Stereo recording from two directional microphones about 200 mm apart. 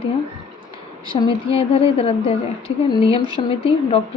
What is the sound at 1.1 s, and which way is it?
Speech, 30° left (ahead or behind).